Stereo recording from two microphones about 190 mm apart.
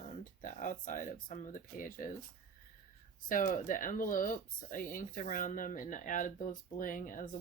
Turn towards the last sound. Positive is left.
turn(degrees=45)  # may be behind; listen again after turning